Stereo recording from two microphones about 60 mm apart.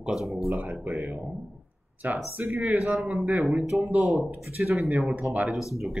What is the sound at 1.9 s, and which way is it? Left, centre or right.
Speech, right.